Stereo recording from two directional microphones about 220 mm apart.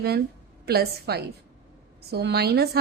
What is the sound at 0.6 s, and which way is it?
A woman's voice, 45° right (ahead or behind).